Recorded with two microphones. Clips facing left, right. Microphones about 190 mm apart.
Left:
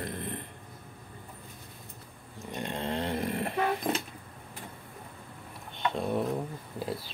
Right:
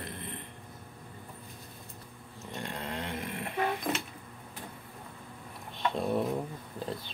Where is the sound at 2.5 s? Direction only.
25° left (ahead or behind).